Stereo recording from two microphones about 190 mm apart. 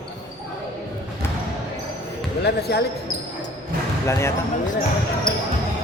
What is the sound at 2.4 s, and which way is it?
Speech, 60° left (ahead or behind).